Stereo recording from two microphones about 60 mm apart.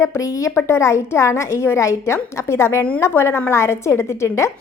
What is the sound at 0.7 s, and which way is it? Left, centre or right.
A woman's voice, left.